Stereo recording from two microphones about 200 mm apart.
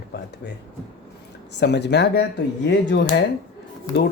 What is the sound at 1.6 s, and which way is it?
Speech, 55° left (ahead or behind).